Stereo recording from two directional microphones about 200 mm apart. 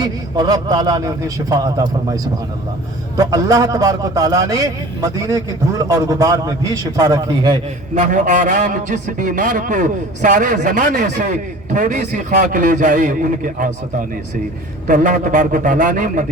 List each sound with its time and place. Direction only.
0.0 s a man's voice: 20° right (ahead or behind)
3.2 s a man's voice: 15° right (ahead or behind)
7.9 s a man's voice: 40° right (ahead or behind)
14.8 s a man's voice: 40° right (ahead or behind)